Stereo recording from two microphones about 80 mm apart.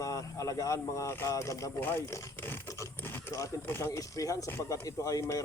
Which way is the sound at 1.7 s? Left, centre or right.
Left.